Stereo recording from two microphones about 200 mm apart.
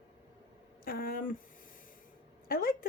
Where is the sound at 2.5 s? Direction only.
45° left (ahead or behind).